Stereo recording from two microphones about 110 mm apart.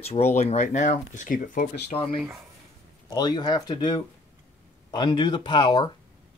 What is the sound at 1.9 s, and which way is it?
Speech, 50° left (ahead or behind).